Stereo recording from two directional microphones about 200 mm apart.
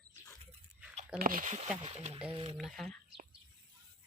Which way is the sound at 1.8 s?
30° right (ahead or behind).